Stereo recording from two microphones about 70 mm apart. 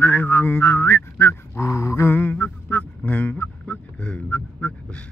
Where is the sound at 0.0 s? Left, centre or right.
Left.